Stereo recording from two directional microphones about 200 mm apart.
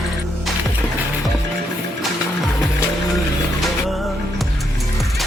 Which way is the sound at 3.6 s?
Centre (ahead or behind).